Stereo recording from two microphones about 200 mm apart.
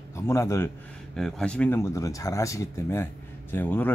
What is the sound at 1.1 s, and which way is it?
Speech, centre (ahead or behind).